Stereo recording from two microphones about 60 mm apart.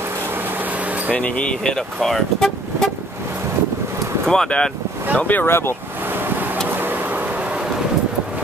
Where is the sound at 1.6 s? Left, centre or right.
Centre.